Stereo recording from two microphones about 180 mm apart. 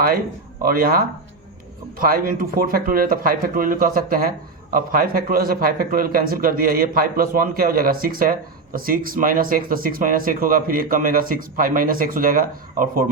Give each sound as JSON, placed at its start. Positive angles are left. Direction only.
{"t": 0.6, "sound": "a man's voice", "side_deg": -55}